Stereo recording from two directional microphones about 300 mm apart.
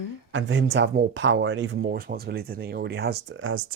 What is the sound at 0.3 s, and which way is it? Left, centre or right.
Speech, right.